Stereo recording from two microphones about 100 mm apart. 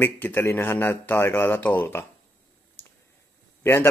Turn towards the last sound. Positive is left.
turn(degrees=25)  # may be behind; listen again after turning